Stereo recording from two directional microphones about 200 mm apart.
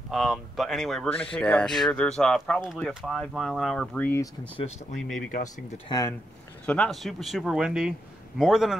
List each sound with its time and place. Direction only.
0.1 s speech: centre (ahead or behind)
5.9 s speech: 20° left (ahead or behind)
6.6 s speech: 5° left (ahead or behind)